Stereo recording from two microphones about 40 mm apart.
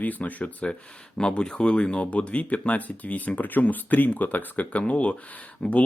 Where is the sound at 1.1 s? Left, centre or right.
Left.